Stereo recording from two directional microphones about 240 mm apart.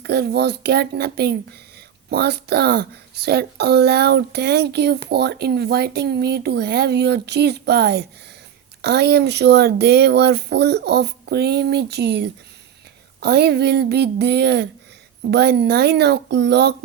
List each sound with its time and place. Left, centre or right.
0.0 s speech: right